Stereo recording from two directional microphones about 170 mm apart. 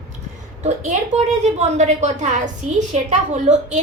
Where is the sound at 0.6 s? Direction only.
45° right (ahead or behind).